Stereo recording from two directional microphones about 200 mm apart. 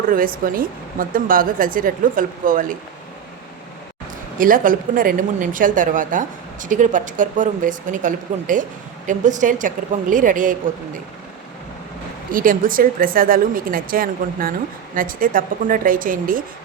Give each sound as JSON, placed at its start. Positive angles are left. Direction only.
{"t": 0.1, "sound": "speech", "side_deg": -45}
{"t": 4.4, "sound": "speech", "side_deg": -45}
{"t": 12.3, "sound": "speech", "side_deg": -45}